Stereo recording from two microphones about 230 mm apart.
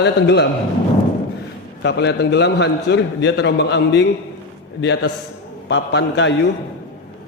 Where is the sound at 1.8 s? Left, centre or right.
Left.